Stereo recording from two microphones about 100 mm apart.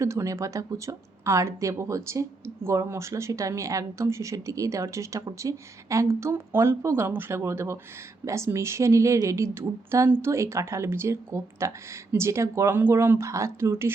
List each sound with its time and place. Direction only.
0.0 s speech: 30° right (ahead or behind)